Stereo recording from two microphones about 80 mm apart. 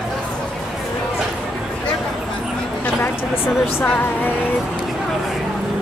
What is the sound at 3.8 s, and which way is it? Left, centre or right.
Speech, left.